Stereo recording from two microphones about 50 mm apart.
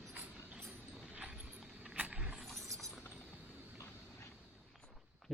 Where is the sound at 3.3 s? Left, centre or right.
Right.